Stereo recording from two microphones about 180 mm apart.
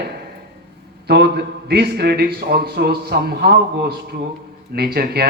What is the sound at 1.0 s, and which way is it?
Speech, 65° right (ahead or behind).